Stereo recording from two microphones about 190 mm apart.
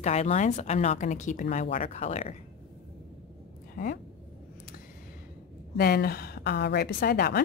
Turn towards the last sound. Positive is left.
turn(degrees=55)  # may be behind; listen again after turning